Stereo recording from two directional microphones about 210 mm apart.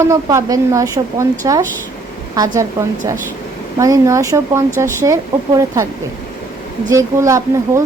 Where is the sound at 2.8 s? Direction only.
15° right (ahead or behind).